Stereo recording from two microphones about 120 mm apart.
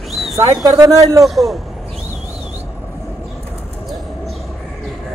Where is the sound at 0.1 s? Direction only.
Centre (ahead or behind).